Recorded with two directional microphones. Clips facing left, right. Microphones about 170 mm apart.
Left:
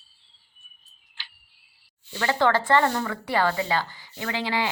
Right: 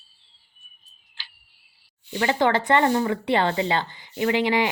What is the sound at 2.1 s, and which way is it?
Speech, 20° right (ahead or behind).